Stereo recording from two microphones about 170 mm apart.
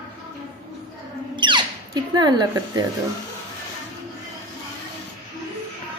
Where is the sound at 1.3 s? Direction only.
30° right (ahead or behind).